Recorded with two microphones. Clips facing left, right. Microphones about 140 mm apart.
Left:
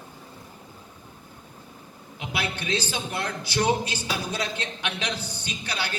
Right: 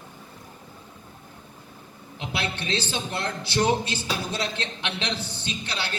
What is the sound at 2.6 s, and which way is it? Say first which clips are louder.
A man's voice: even; 25° right (ahead or behind).